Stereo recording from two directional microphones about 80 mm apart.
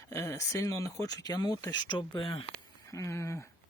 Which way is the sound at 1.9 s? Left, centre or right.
Left.